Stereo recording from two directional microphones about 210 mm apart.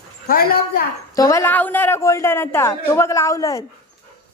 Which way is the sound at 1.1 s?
15° left (ahead or behind).